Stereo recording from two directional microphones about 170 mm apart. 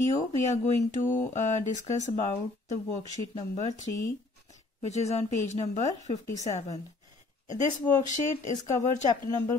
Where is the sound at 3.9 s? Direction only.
75° left (ahead or behind).